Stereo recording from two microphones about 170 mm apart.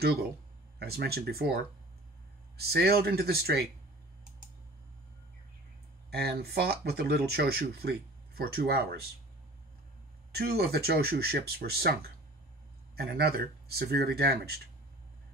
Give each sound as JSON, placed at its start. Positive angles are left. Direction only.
{"t": 0.0, "sound": "speech", "side_deg": -70}
{"t": 6.0, "sound": "speech", "side_deg": -70}
{"t": 10.3, "sound": "speech", "side_deg": -65}